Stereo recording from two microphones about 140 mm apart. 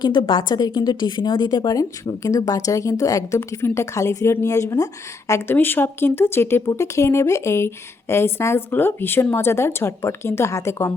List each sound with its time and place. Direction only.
0.0 s a woman's voice: 35° left (ahead or behind); by 10.9 s 20° left (ahead or behind)